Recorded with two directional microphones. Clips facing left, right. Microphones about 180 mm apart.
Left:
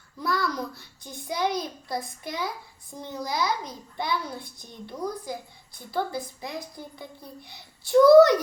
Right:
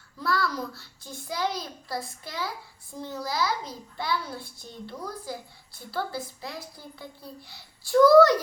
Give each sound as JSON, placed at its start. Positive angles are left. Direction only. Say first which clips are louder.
{"t": 0.2, "sound": "a child's voice", "louder": "even", "side_deg": 15}